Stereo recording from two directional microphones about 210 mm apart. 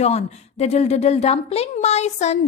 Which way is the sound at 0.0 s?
30° left (ahead or behind).